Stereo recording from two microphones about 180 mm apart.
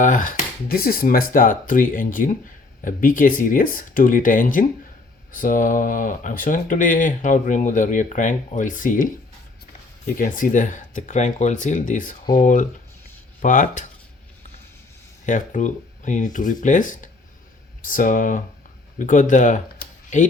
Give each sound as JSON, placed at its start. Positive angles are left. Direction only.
{"t": 0.0, "sound": "speech", "side_deg": 45}
{"t": 10.2, "sound": "speech", "side_deg": 50}
{"t": 15.3, "sound": "speech", "side_deg": 45}